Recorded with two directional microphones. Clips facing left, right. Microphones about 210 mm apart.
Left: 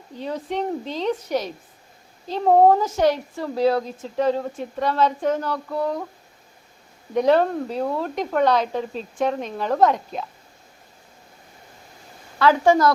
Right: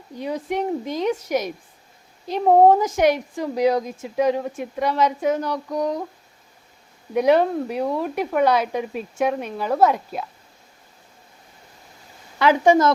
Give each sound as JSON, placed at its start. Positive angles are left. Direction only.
{"t": 0.2, "sound": "speech", "side_deg": -15}
{"t": 7.1, "sound": "speech", "side_deg": -10}
{"t": 12.4, "sound": "speech", "side_deg": -15}